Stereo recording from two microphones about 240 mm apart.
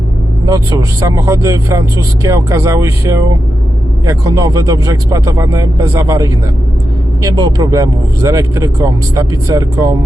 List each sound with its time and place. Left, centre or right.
0.4 s speech: centre